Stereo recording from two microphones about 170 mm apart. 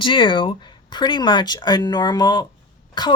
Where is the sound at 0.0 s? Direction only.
30° left (ahead or behind).